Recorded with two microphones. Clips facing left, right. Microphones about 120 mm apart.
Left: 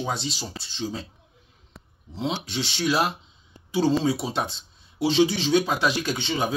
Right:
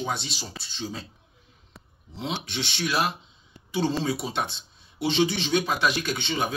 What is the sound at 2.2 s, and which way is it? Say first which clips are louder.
Speech: left 3 dB; 35° left (ahead or behind).